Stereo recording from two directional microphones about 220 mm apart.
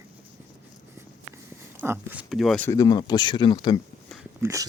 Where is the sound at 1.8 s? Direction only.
10° right (ahead or behind).